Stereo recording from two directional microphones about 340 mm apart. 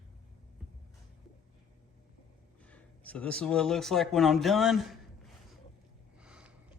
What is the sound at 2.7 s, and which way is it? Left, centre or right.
Speech, centre.